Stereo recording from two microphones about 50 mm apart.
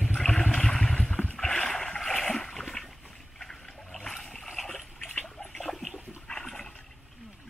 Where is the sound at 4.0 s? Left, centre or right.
Centre.